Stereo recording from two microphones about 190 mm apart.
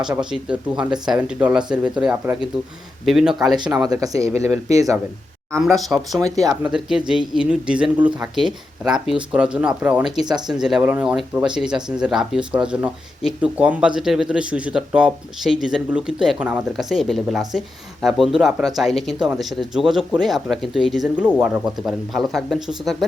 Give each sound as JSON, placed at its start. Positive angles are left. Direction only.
{"t": 0.0, "sound": "speech", "side_deg": -5}
{"t": 3.7, "sound": "speech", "side_deg": -20}
{"t": 5.6, "sound": "speech", "side_deg": 0}